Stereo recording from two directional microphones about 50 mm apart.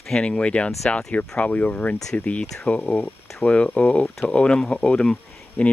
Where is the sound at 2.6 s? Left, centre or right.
Left.